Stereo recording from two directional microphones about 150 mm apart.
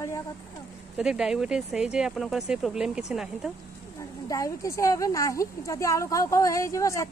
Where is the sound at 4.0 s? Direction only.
20° left (ahead or behind).